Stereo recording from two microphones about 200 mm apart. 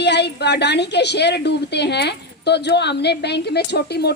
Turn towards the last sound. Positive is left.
turn(degrees=55)  # may be behind; listen again after turning